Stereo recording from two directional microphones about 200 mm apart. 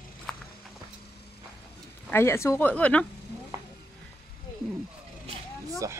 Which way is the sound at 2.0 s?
10° left (ahead or behind).